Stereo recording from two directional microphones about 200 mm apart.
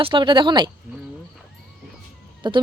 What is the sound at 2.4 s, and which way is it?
Music, 25° right (ahead or behind).